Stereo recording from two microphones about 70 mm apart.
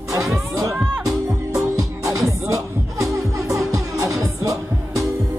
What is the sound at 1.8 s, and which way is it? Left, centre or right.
Music, right.